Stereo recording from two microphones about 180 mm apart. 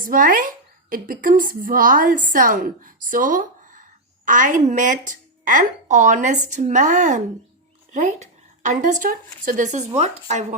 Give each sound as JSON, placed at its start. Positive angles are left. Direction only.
{"t": 0.0, "sound": "a woman's voice", "side_deg": -50}